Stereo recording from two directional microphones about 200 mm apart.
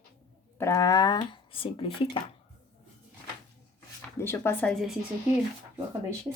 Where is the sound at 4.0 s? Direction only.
10° left (ahead or behind).